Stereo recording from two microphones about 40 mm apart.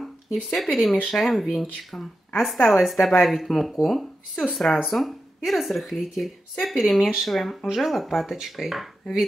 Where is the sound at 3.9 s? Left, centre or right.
Centre.